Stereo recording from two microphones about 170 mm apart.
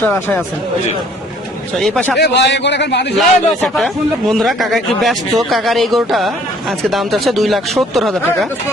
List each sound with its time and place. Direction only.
0.0 s speech: 10° left (ahead or behind)
1.8 s speech: 5° left (ahead or behind)
2.1 s a man's voice: 75° left (ahead or behind)
3.2 s a man's voice: centre (ahead or behind)